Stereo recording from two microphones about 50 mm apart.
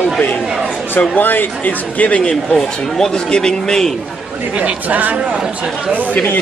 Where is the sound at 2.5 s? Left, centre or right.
Centre.